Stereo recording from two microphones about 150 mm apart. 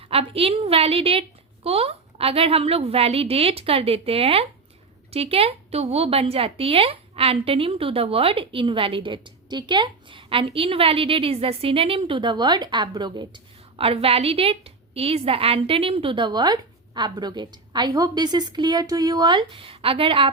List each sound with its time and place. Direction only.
0.0 s a woman's voice: 40° right (ahead or behind)